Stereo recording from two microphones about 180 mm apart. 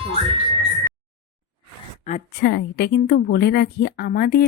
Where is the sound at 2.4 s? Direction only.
70° left (ahead or behind).